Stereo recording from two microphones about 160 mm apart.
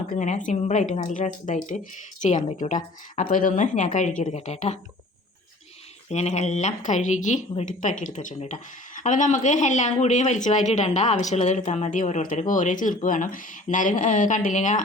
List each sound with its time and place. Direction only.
0.1 s speech: 50° left (ahead or behind)
6.1 s speech: 45° left (ahead or behind)